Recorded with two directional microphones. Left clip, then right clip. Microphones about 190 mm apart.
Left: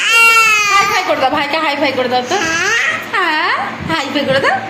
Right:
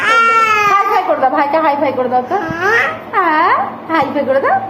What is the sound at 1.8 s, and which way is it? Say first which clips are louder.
Speech: even; centre (ahead or behind).